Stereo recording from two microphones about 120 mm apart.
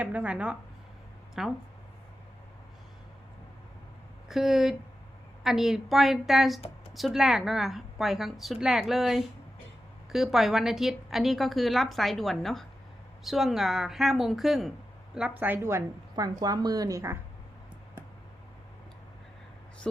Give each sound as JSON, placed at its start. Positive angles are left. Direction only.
{"t": 0.0, "sound": "a woman's voice", "side_deg": -10}
{"t": 4.3, "sound": "a woman's voice", "side_deg": -5}
{"t": 16.1, "sound": "a woman's voice", "side_deg": -30}